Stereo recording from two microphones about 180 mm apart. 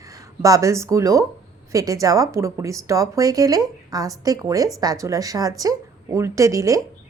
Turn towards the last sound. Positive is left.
turn(degrees=-20)  # may be behind; listen again after turning